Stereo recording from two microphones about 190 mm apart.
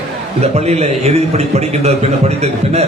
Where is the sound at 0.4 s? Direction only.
35° right (ahead or behind).